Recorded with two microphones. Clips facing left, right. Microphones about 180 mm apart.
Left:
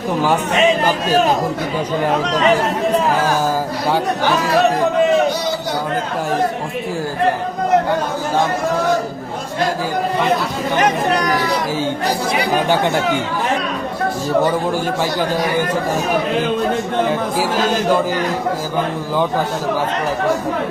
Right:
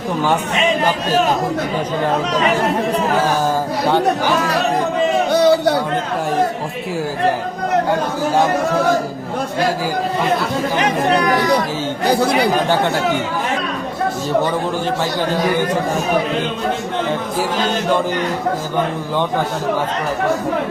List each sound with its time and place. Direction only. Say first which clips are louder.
5.3 s a sound: right 9 dB; 60° right (ahead or behind)
12.1 s speech: right 4 dB; 60° right (ahead or behind)
12.6 s a man's voice: even; 15° left (ahead or behind)
17.1 s a man's voice: left 2 dB; 10° left (ahead or behind)